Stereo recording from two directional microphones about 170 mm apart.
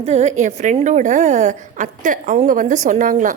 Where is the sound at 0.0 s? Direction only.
40° right (ahead or behind).